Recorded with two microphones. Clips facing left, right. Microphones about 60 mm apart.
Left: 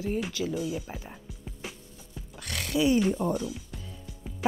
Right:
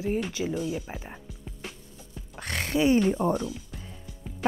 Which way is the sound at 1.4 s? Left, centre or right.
Centre.